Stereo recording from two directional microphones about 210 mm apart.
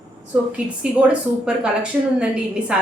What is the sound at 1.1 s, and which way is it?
A woman's voice, 5° right (ahead or behind).